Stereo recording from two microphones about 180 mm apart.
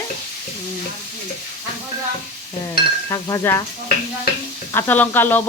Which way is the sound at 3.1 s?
15° left (ahead or behind).